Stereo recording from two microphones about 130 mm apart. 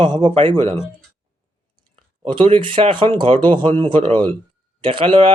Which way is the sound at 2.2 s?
40° right (ahead or behind).